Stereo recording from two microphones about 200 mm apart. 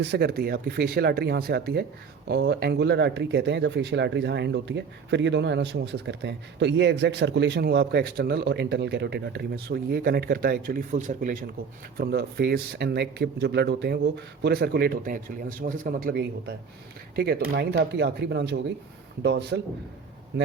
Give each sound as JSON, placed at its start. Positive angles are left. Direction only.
{"t": 0.0, "sound": "speech", "side_deg": -55}